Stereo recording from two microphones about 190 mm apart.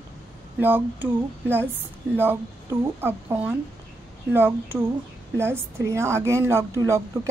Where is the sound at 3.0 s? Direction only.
10° right (ahead or behind).